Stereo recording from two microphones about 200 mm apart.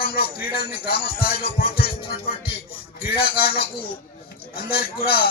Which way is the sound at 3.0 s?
25° left (ahead or behind).